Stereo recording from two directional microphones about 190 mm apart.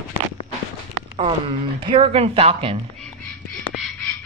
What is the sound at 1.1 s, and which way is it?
Speech, 25° right (ahead or behind).